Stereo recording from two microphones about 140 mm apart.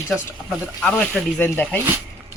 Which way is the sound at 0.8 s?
5° left (ahead or behind).